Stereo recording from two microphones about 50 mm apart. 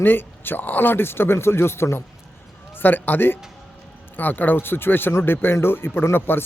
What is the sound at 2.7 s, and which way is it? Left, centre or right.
Speech, left.